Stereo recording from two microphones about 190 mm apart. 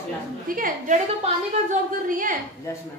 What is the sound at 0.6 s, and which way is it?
A woman's voice, 45° right (ahead or behind).